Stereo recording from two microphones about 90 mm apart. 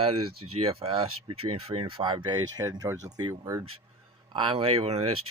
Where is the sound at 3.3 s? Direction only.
35° right (ahead or behind).